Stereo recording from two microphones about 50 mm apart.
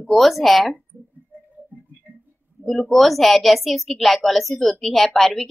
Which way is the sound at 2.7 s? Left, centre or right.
Centre.